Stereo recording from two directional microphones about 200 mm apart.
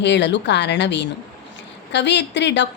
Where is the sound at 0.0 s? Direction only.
60° left (ahead or behind).